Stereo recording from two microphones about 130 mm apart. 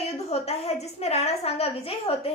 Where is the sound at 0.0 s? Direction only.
55° left (ahead or behind).